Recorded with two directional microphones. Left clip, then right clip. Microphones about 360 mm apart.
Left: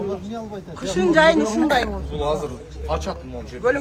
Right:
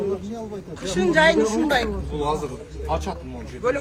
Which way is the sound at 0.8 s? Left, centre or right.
Left.